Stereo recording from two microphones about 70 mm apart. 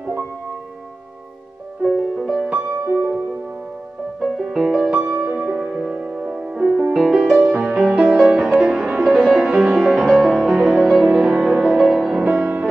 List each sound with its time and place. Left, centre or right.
1.8 s music: centre
2.9 s music: centre
4.2 s music: centre
12.3 s music: right